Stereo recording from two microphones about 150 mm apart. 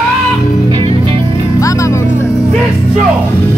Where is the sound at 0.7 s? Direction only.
35° right (ahead or behind).